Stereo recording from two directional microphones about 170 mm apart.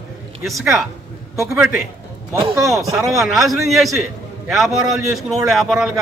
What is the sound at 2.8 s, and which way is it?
Speech, 20° right (ahead or behind).